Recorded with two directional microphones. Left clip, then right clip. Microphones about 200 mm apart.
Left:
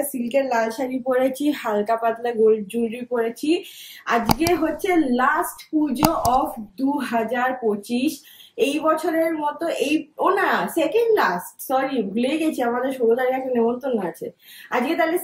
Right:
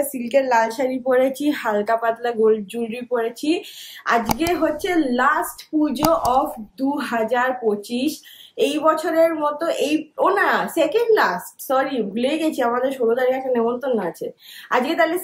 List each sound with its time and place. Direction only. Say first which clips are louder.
0.0 s speech: right 3 dB; centre (ahead or behind)